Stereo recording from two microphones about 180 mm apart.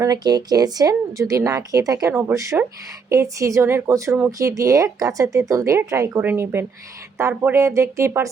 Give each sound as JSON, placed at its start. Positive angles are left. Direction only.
{"t": 0.0, "sound": "speech", "side_deg": -20}